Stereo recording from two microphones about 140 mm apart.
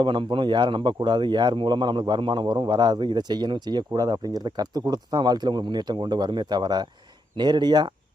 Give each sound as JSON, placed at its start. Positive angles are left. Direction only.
{"t": 0.0, "sound": "speech", "side_deg": -35}